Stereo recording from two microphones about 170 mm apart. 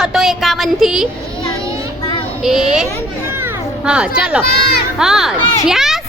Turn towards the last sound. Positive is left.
turn(degrees=0)  # may be behind; listen again after turning